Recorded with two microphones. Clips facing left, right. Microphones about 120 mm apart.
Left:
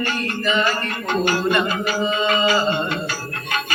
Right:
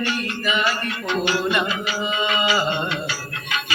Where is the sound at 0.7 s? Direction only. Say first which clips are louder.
Left 1 dB; 45° left (ahead or behind).